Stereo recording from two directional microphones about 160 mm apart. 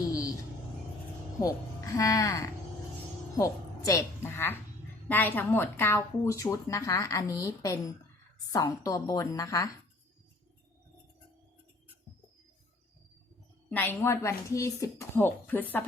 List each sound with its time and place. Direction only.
0.0 s music: 20° left (ahead or behind)
1.4 s a woman's voice: 20° left (ahead or behind)
13.7 s speech: 10° left (ahead or behind)